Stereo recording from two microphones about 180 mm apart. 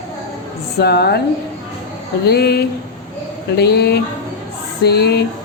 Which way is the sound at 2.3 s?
65° left (ahead or behind).